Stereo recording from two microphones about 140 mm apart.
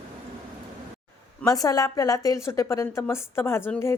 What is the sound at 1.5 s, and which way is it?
A woman's voice, 25° left (ahead or behind).